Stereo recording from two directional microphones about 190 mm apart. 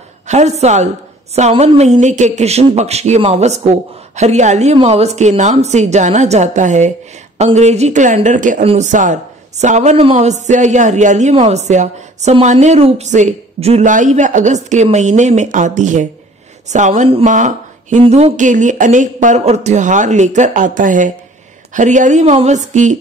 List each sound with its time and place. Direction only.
0.3 s speech: 35° right (ahead or behind)